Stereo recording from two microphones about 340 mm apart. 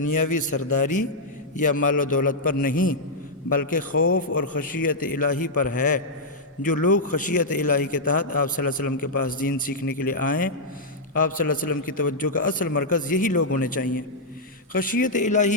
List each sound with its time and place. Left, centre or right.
0.1 s a man's voice: left
1.6 s a man's voice: left